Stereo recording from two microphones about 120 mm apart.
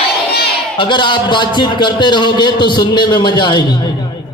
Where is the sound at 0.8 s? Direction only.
40° left (ahead or behind).